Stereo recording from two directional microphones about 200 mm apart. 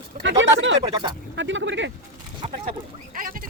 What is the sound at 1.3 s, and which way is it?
Vehicle, 65° right (ahead or behind).